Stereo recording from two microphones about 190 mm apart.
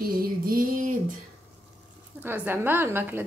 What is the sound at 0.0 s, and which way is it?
Music, 50° right (ahead or behind).